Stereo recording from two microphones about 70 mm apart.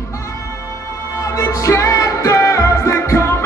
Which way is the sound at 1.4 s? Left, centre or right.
Left.